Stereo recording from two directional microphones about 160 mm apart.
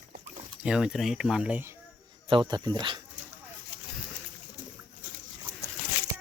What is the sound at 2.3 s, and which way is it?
Speech, 30° right (ahead or behind).